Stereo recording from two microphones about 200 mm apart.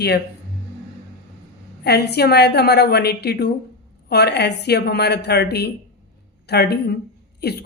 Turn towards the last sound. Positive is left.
turn(degrees=55)  # may be behind; listen again after turning